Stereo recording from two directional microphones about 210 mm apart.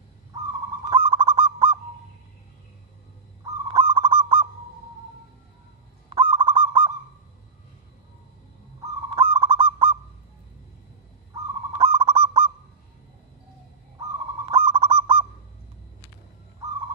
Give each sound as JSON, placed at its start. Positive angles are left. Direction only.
{"t": 0.8, "sound": "owl", "side_deg": -25}
{"t": 3.6, "sound": "goose", "side_deg": -25}
{"t": 6.3, "sound": "goose", "side_deg": -25}
{"t": 9.1, "sound": "goose", "side_deg": -25}
{"t": 11.8, "sound": "goose", "side_deg": -25}
{"t": 14.4, "sound": "goose", "side_deg": -25}